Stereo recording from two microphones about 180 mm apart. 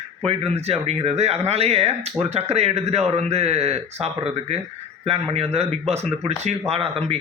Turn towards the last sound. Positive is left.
turn(degrees=-35)  # may be behind; listen again after turning